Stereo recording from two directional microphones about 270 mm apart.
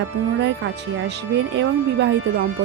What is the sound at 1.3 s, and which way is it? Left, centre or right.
Speech, right.